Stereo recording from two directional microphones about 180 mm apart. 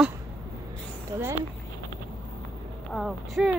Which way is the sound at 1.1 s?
20° right (ahead or behind).